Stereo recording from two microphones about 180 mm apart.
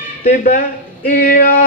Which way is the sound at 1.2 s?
50° left (ahead or behind).